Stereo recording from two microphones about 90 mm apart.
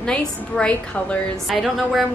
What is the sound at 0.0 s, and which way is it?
Speech, 10° left (ahead or behind).